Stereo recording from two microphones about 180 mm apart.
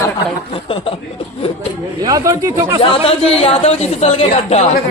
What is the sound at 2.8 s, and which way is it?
Speech, 30° left (ahead or behind).